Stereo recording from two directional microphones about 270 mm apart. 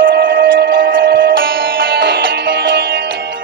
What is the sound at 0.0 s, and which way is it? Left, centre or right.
Music, right.